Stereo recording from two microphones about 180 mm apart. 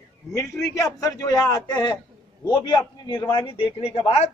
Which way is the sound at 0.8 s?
20° left (ahead or behind).